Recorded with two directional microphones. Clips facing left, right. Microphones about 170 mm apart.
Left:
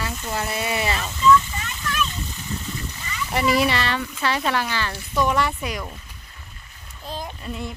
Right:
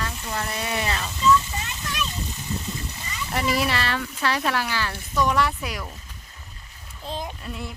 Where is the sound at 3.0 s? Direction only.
25° right (ahead or behind).